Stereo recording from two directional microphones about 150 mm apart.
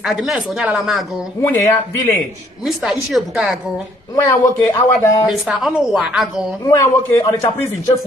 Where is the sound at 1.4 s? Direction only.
15° left (ahead or behind).